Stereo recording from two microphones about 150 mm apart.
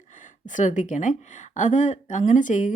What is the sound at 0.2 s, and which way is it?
Speech, 60° left (ahead or behind).